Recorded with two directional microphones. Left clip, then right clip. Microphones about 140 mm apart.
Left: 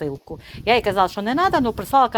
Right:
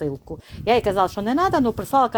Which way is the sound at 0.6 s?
30° right (ahead or behind).